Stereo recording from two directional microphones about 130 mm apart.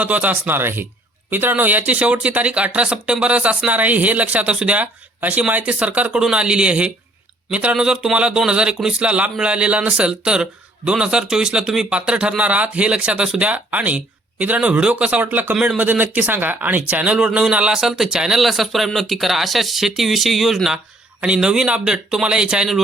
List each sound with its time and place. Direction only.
0.0 s speech: 10° right (ahead or behind)